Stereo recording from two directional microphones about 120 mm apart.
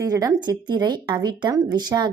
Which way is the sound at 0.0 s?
30° right (ahead or behind).